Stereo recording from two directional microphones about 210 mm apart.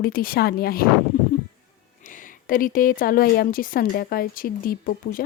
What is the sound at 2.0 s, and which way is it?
Speech, 40° left (ahead or behind).